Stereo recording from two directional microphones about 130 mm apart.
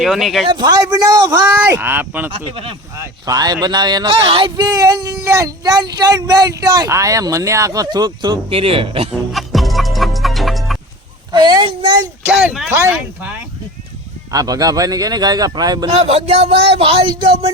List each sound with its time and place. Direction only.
0.0 s speech: centre (ahead or behind)
0.4 s speech: 35° right (ahead or behind); by 2.3 s 15° right (ahead or behind)
3.0 s speech: 30° right (ahead or behind); by 9.0 s 45° right (ahead or behind)
9.3 s music: centre (ahead or behind)
11.3 s a sound: 35° right (ahead or behind)
12.2 s a sound: 15° right (ahead or behind)
14.3 s speech: 30° right (ahead or behind)
16.0 s speech: 50° right (ahead or behind)